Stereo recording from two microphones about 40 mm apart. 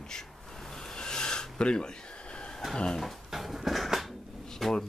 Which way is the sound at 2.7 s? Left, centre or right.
Centre.